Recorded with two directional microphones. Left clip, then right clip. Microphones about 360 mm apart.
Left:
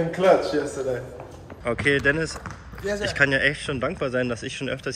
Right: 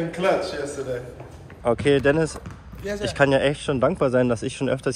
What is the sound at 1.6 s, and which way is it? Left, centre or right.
Speech, centre.